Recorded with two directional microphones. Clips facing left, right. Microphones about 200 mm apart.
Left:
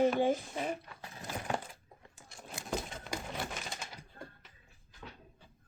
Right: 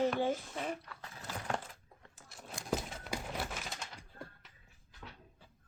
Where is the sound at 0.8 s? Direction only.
20° left (ahead or behind).